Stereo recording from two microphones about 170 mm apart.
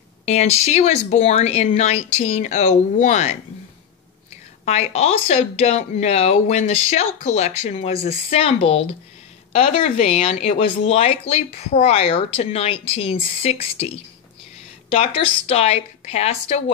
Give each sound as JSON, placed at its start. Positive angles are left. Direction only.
{"t": 0.2, "sound": "speech", "side_deg": 40}
{"t": 4.6, "sound": "speech", "side_deg": 40}